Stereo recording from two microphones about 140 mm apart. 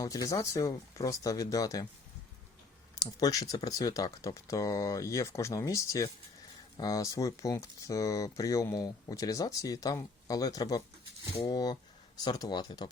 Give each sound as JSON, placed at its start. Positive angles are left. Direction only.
{"t": 0.0, "sound": "speech", "side_deg": 25}
{"t": 3.0, "sound": "speech", "side_deg": 25}